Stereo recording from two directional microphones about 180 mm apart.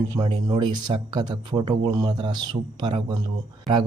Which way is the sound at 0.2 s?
25° right (ahead or behind).